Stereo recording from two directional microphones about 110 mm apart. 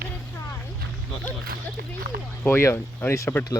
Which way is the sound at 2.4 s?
20° left (ahead or behind).